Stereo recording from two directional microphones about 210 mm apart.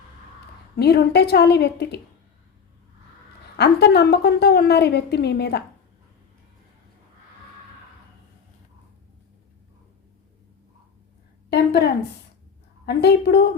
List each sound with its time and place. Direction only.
0.8 s a woman's voice: 50° left (ahead or behind)
3.6 s a woman's voice: 50° left (ahead or behind)
11.4 s a sound: 50° left (ahead or behind)
12.8 s a woman's voice: 50° left (ahead or behind)